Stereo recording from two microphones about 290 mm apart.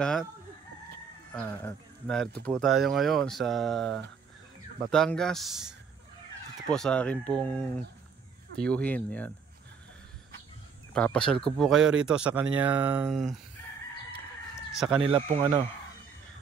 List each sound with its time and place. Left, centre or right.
0.0 s speech: centre
1.3 s speech: centre
10.9 s speech: centre
15.0 s speech: centre